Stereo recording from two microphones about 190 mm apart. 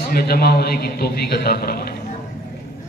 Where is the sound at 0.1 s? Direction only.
55° left (ahead or behind).